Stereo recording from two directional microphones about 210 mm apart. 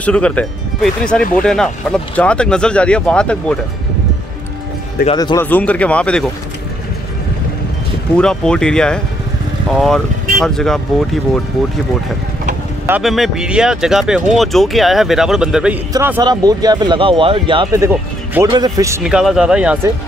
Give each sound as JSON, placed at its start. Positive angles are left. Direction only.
{"t": 0.0, "sound": "speech", "side_deg": 5}
{"t": 5.1, "sound": "speech", "side_deg": 20}
{"t": 5.5, "sound": "speech", "side_deg": 5}
{"t": 8.2, "sound": "speech", "side_deg": 5}
{"t": 12.8, "sound": "speech", "side_deg": -5}
{"t": 15.9, "sound": "speech", "side_deg": -15}
{"t": 17.8, "sound": "speech", "side_deg": -15}